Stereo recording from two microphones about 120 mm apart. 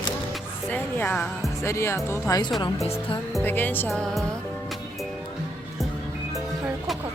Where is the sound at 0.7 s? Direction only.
15° left (ahead or behind).